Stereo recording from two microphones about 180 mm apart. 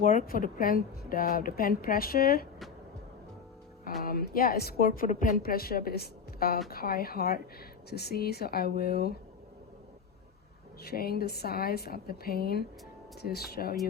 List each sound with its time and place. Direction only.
0.0 s a woman's voice: 45° left (ahead or behind)
4.0 s speech: 55° left (ahead or behind)
10.8 s speech: 55° left (ahead or behind)